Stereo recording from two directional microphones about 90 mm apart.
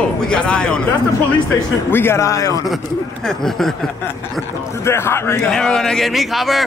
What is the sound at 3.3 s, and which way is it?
Speech, 5° left (ahead or behind).